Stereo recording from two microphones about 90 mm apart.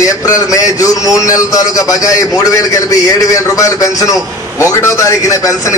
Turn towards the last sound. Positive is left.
turn(degrees=40)  # may be behind; listen again after turning